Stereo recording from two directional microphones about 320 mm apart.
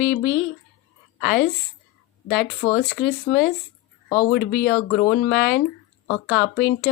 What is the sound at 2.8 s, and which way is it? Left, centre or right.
Speech, left.